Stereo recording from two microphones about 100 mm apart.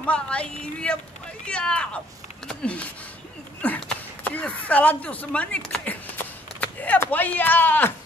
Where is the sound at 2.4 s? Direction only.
15° left (ahead or behind).